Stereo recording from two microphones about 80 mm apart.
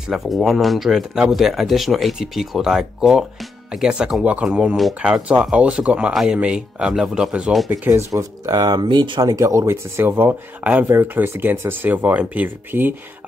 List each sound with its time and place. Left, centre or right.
0.1 s speech: centre
7.8 s speech: right
8.1 s speech: right
8.8 s speech: right
9.2 s speech: right